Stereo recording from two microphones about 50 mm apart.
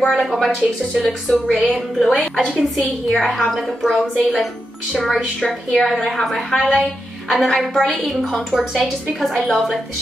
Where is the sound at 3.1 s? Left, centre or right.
Centre.